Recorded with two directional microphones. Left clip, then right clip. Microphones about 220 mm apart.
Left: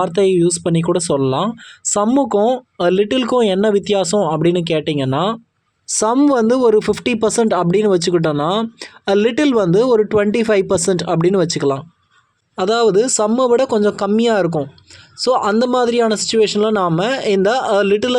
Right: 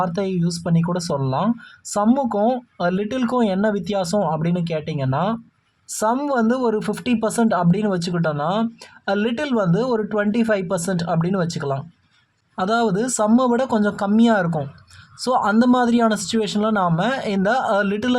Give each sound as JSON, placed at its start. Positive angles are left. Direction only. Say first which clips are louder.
{"t": 0.0, "sound": "speech", "louder": "left 9 dB", "side_deg": 25}